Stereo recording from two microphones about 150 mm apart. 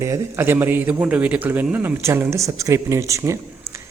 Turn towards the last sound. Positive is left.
turn(degrees=-20)  # may be behind; listen again after turning